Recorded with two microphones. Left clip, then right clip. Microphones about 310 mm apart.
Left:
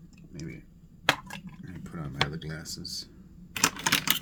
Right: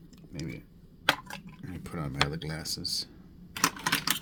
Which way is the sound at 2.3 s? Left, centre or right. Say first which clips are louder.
Right 3 dB; right.